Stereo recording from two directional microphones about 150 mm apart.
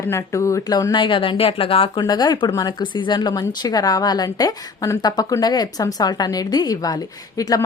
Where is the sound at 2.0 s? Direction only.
25° left (ahead or behind).